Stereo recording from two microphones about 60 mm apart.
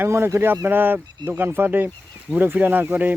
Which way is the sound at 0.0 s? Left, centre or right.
Right.